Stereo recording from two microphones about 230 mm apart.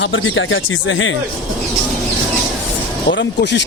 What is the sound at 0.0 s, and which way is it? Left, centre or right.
Speech, left.